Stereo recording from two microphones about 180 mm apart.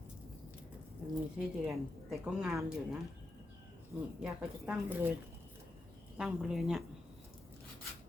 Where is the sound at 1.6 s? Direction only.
5° right (ahead or behind).